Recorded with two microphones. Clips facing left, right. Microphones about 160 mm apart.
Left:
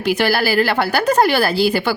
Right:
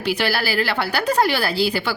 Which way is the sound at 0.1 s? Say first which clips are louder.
Left 5 dB; 45° left (ahead or behind).